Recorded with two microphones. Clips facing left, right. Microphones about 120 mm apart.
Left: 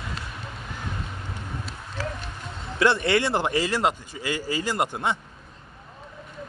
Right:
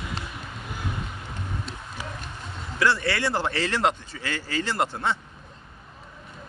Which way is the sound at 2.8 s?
20° left (ahead or behind).